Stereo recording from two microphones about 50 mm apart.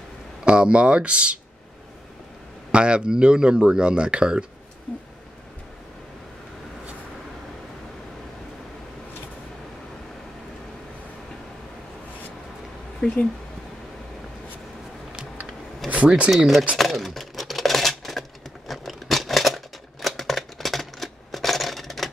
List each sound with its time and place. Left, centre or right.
0.5 s speech: right
2.7 s speech: right
13.0 s speech: centre
15.9 s speech: right
16.7 s a sound: centre
18.7 s scissors: centre